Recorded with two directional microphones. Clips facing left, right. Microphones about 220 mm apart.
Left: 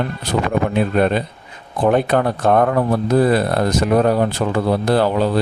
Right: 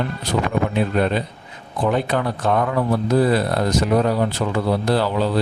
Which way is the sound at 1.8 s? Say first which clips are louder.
Left 5 dB; 55° left (ahead or behind).